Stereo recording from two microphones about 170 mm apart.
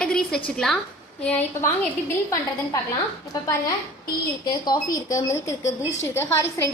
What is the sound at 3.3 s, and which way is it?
A woman's voice, 20° left (ahead or behind).